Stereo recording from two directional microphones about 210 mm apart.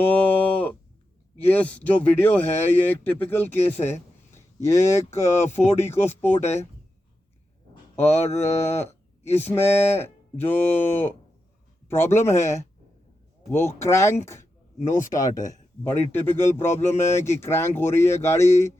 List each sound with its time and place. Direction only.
0.1 s a sound: 10° left (ahead or behind)
1.4 s speech: 10° left (ahead or behind)
3.6 s mantra: 30° left (ahead or behind)
4.4 s speech: 15° left (ahead or behind)
6.4 s speech: 30° left (ahead or behind)
8.1 s mantra: 30° left (ahead or behind)
8.4 s speech: 10° left (ahead or behind)
14.8 s speech: 40° left (ahead or behind)
15.1 s speech: 15° left (ahead or behind)